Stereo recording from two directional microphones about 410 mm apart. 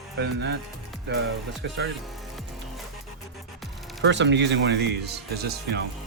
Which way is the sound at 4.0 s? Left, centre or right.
Right.